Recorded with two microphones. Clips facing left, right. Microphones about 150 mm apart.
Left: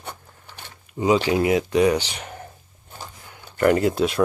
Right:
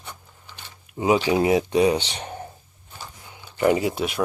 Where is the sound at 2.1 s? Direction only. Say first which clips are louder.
Right 3 dB; 25° right (ahead or behind).